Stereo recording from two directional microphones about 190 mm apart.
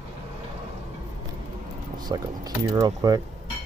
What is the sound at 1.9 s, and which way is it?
Speech, 20° right (ahead or behind).